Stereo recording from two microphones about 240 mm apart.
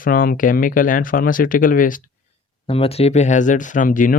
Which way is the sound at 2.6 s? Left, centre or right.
Left.